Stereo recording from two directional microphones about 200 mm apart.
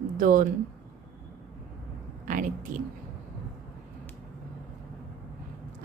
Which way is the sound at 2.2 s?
40° right (ahead or behind).